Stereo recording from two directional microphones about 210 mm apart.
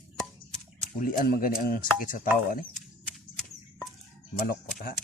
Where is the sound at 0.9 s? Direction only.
40° left (ahead or behind).